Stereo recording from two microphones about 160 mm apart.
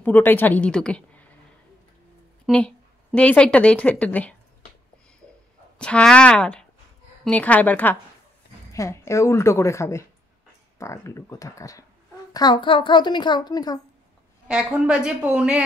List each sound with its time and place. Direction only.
0.0 s a woman's voice: 10° left (ahead or behind)
2.4 s a woman's voice: 5° left (ahead or behind)
5.8 s a woman's voice: 5° left (ahead or behind); by 13.7 s 25° left (ahead or behind)
14.5 s a woman's voice: 5° right (ahead or behind)